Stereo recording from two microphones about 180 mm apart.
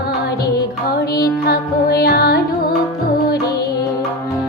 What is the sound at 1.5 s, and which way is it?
Music, 60° left (ahead or behind).